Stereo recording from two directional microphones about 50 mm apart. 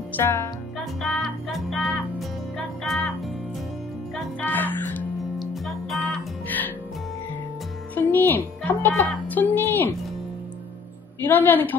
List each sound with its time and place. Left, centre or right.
0.2 s music: left
1.0 s music: centre
4.4 s music: left
5.4 s music: centre
7.9 s music: left
9.3 s a woman's voice: left
11.2 s a woman's voice: left